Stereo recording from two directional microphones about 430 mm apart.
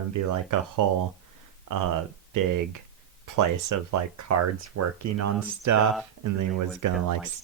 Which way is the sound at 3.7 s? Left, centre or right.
Right.